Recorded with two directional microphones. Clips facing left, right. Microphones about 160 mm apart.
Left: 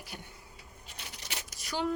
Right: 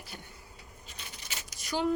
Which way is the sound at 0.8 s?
75° left (ahead or behind).